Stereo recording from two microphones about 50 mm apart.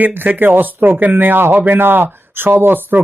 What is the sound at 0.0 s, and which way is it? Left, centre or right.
Speech, right.